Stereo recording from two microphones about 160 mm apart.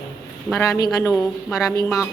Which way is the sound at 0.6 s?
20° left (ahead or behind).